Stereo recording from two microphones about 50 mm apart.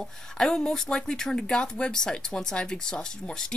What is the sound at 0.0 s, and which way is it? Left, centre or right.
Speech, centre.